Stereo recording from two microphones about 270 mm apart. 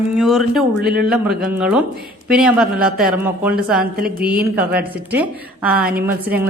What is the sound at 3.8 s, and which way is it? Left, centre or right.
Speech, right.